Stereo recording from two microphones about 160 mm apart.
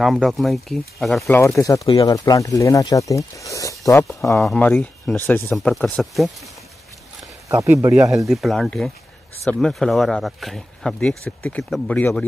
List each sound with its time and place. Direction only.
0.0 s speech: centre (ahead or behind)
1.4 s speech: 20° left (ahead or behind)
4.4 s speech: 5° left (ahead or behind)
7.4 s speech: 20° right (ahead or behind)
8.3 s speech: centre (ahead or behind)